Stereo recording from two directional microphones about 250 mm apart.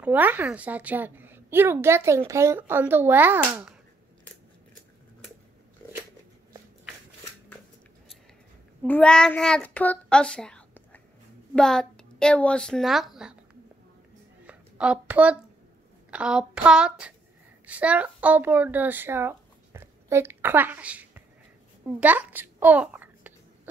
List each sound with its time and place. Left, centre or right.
0.0 s a woman's voice: centre
8.8 s a child's voice: centre
14.4 s a sound: centre
16.1 s speech: centre
21.8 s babbling: centre